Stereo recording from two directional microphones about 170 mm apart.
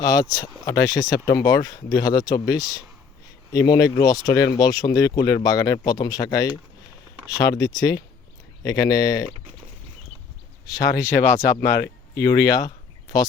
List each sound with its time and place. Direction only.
0.0 s speech: 20° left (ahead or behind)
10.7 s speech: 20° left (ahead or behind)